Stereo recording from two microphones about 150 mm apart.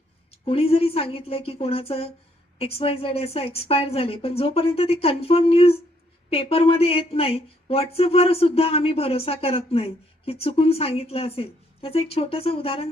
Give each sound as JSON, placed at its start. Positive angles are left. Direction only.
{"t": 0.3, "sound": "speech", "side_deg": 40}